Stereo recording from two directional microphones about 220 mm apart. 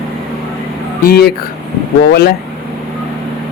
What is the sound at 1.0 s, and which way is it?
Speech, 45° left (ahead or behind).